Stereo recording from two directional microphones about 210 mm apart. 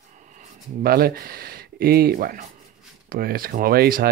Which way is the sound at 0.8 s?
45° right (ahead or behind).